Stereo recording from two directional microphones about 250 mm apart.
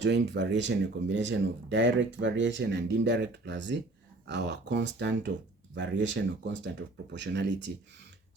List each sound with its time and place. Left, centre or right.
0.0 s speech: right